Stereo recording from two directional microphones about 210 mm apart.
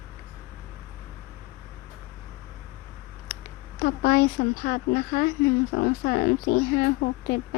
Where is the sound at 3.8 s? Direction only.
45° left (ahead or behind).